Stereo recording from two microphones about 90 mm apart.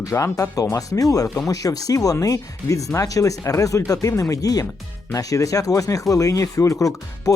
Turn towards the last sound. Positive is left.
turn(degrees=40)  # may be behind; listen again after turning